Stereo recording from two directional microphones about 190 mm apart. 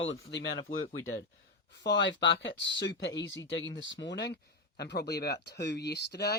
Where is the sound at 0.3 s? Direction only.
65° left (ahead or behind).